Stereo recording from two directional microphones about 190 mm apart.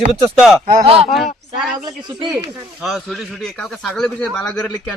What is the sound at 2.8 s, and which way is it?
A man's voice, centre (ahead or behind).